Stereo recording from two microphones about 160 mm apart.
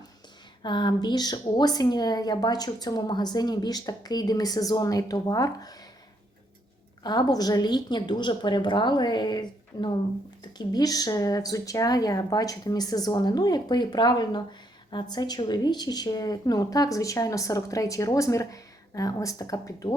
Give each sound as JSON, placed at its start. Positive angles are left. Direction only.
{"t": 0.6, "sound": "speech", "side_deg": 30}
{"t": 7.0, "sound": "speech", "side_deg": 25}